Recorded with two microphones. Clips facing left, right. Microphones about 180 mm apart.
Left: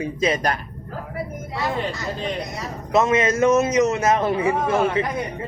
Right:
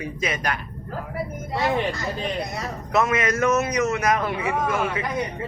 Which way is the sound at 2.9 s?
25° left (ahead or behind).